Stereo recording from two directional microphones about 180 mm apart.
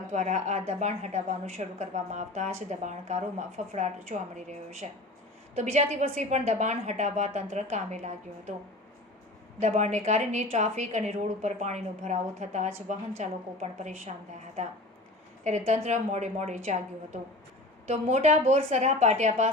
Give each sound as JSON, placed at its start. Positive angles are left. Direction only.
{"t": 0.1, "sound": "a woman's voice", "side_deg": -40}
{"t": 9.6, "sound": "a woman's voice", "side_deg": -40}
{"t": 15.4, "sound": "a woman's voice", "side_deg": -40}